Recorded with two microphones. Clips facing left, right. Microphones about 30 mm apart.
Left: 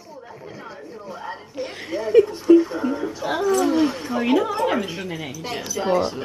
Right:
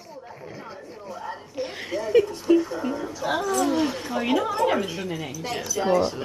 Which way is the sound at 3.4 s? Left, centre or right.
Centre.